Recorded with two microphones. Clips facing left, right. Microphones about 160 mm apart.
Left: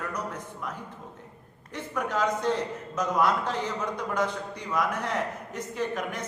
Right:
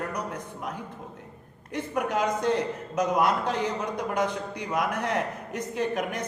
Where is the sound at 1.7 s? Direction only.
15° right (ahead or behind).